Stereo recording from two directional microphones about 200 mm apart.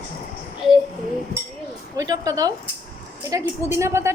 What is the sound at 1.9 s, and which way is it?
A woman's voice, 20° right (ahead or behind).